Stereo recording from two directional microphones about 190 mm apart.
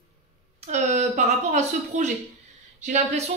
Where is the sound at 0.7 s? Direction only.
35° right (ahead or behind).